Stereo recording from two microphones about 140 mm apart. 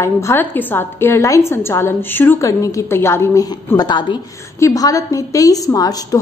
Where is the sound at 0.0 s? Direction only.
15° left (ahead or behind).